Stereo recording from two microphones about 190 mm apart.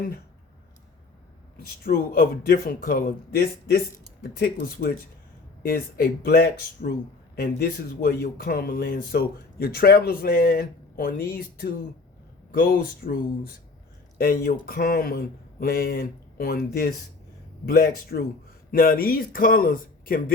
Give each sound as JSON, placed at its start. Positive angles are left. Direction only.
{"t": 1.5, "sound": "speech", "side_deg": 55}